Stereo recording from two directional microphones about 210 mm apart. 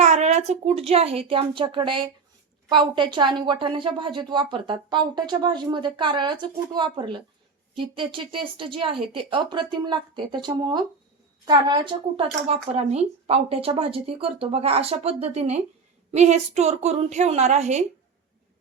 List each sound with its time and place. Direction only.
0.0 s a woman's voice: 30° right (ahead or behind)